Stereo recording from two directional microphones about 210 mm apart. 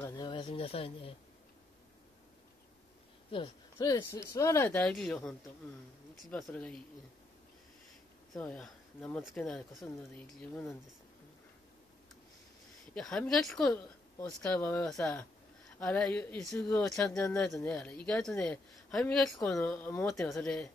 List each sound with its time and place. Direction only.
0.0 s a sound: 20° left (ahead or behind)
3.7 s speech: 15° left (ahead or behind)
6.3 s speech: 5° left (ahead or behind)
8.3 s speech: 5° left (ahead or behind)
12.9 s speech: 5° left (ahead or behind)